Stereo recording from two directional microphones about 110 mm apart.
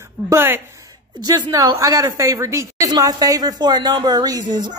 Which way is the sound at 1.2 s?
40° right (ahead or behind).